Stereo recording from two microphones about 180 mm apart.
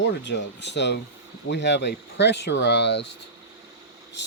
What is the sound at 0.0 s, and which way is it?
Speech, 75° left (ahead or behind).